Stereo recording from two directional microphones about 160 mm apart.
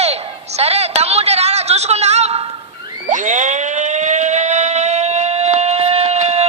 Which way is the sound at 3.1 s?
50° right (ahead or behind).